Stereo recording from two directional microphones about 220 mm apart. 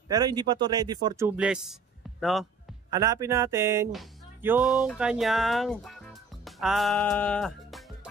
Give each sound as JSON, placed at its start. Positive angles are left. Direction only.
{"t": 0.1, "sound": "speech", "side_deg": -20}
{"t": 2.9, "sound": "speech", "side_deg": -15}